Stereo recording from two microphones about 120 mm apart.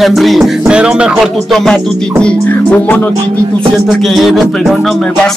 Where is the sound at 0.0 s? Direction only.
Centre (ahead or behind).